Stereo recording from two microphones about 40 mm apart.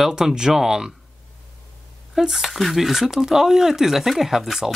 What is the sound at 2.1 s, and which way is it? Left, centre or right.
Speech, centre.